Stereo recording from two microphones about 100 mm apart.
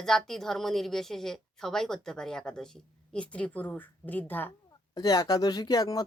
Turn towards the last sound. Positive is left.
turn(degrees=40)  # may be behind; listen again after turning